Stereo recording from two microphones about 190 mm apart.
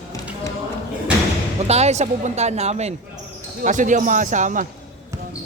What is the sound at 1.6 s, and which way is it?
Speech, 35° right (ahead or behind).